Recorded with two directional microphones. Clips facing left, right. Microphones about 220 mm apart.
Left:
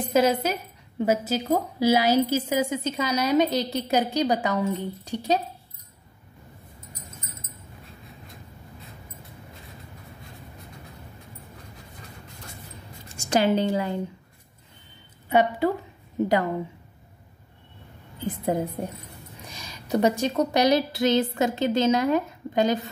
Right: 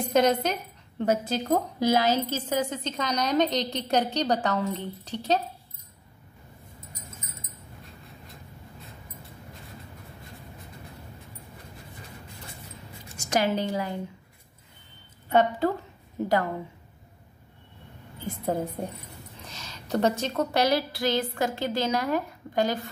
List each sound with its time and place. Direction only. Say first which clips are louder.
0.1 s a woman's voice: left 1 dB; 5° left (ahead or behind)
13.2 s a woman's voice: left 4 dB; 30° left (ahead or behind)
15.2 s a woman's voice: left 1 dB; 10° left (ahead or behind)
18.2 s a woman's voice: left 3 dB; 15° left (ahead or behind)